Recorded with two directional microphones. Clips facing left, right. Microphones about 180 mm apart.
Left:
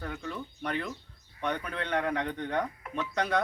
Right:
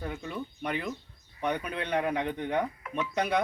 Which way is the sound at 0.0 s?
20° right (ahead or behind).